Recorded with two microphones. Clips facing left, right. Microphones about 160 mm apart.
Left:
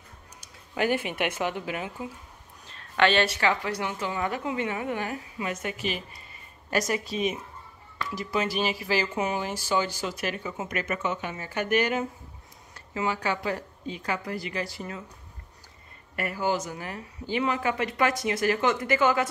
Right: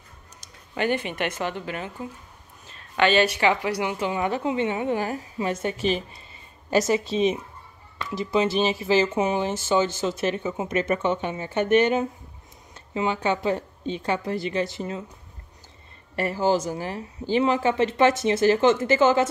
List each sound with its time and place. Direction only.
0.4 s speech: 5° left (ahead or behind)
2.6 s a sound: 5° right (ahead or behind)
3.3 s speech: 20° right (ahead or behind)
16.2 s speech: 30° right (ahead or behind)